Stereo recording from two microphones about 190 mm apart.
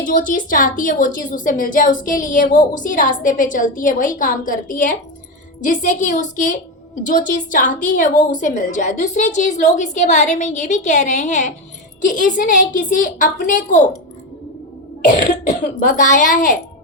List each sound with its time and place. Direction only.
0.0 s a woman's voice: 45° left (ahead or behind)
15.4 s a woman's voice: 45° left (ahead or behind)